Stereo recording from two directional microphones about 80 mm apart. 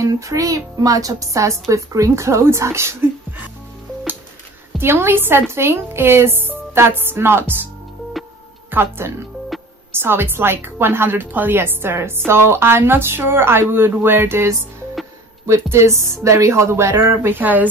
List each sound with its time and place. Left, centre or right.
0.0 s a woman's voice: right
4.7 s a woman's voice: right
8.6 s a woman's voice: right